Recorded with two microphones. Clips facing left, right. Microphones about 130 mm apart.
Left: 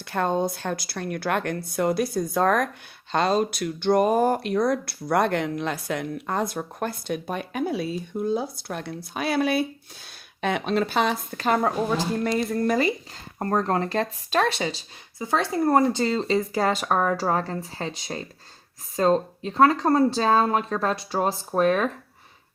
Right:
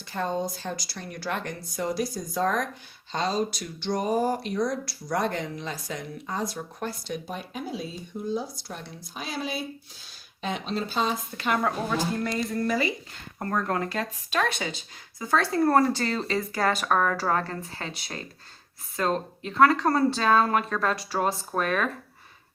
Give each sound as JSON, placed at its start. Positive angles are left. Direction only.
{"t": 0.0, "sound": "speech", "side_deg": 60}
{"t": 11.3, "sound": "speech", "side_deg": 35}
{"t": 12.6, "sound": "speech", "side_deg": 45}
{"t": 13.4, "sound": "speech", "side_deg": 35}
{"t": 15.2, "sound": "speech", "side_deg": 20}